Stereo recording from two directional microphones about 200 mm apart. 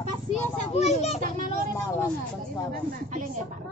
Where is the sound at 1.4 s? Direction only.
45° right (ahead or behind).